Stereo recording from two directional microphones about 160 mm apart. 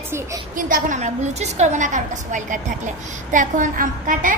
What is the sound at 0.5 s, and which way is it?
A child's voice, 60° right (ahead or behind).